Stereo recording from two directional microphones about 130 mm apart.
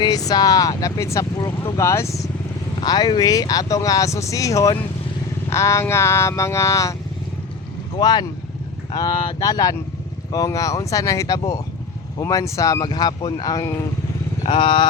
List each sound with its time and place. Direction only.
0.0 s speech: 30° left (ahead or behind)
2.8 s speech: 30° left (ahead or behind)
7.9 s speech: 35° left (ahead or behind)
14.6 s speech: 40° left (ahead or behind)